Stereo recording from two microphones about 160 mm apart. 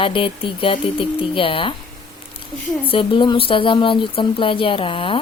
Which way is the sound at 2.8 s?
35° left (ahead or behind).